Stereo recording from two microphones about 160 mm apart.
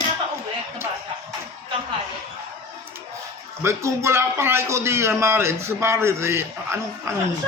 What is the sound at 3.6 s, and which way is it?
A man's voice, 15° right (ahead or behind).